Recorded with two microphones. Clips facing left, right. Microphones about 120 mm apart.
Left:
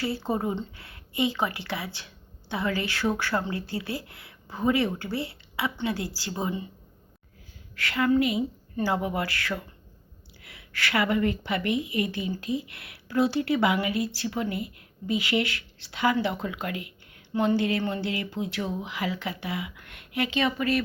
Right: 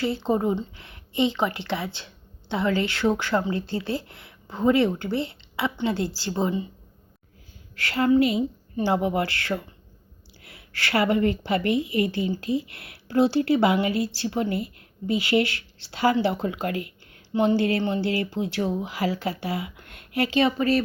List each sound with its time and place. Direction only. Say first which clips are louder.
0.3 s a woman's voice: right 5 dB; 25° right (ahead or behind)
7.8 s a woman's voice: right 3 dB; 30° right (ahead or behind)